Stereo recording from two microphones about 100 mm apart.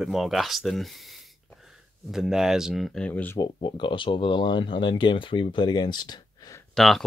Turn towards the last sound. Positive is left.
turn(degrees=0)  # may be behind; listen again after turning